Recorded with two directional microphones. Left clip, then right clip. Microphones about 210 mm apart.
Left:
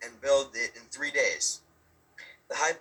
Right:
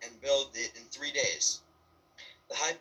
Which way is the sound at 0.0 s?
25° left (ahead or behind).